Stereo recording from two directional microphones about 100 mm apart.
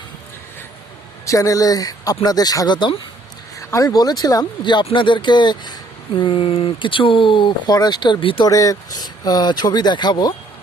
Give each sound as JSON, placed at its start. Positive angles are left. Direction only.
{"t": 1.2, "sound": "speech", "side_deg": 35}
{"t": 3.6, "sound": "speech", "side_deg": 30}
{"t": 8.4, "sound": "speech", "side_deg": 35}